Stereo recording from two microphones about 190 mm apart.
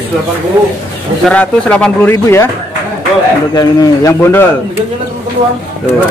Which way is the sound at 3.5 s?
20° left (ahead or behind).